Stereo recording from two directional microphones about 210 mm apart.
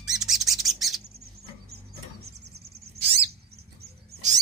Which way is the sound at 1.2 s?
50° right (ahead or behind).